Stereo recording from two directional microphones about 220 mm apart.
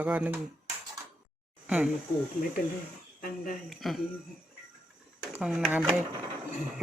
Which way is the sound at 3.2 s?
40° left (ahead or behind).